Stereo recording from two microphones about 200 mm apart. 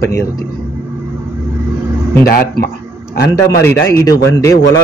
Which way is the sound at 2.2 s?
50° left (ahead or behind).